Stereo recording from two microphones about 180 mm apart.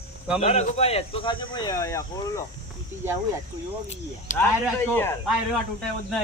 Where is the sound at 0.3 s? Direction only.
35° left (ahead or behind); by 2.4 s 15° left (ahead or behind).